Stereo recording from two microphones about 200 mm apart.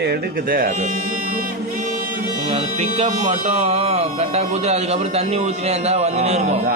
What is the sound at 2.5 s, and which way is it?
Speech, 30° right (ahead or behind).